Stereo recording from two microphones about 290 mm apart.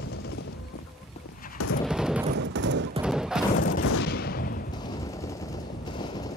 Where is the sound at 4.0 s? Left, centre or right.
Left.